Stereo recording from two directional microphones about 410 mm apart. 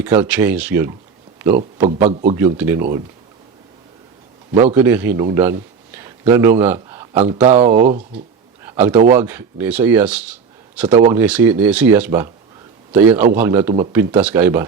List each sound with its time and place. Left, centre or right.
0.0 s speech: centre
1.8 s speech: centre
4.5 s a man's voice: centre